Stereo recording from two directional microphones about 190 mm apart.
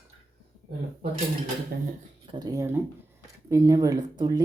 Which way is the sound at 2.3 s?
20° right (ahead or behind).